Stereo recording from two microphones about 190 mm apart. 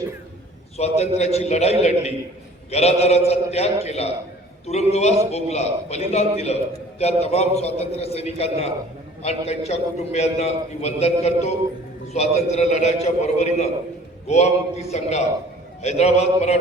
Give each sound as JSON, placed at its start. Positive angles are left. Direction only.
{"t": 0.8, "sound": "a man's voice", "side_deg": 35}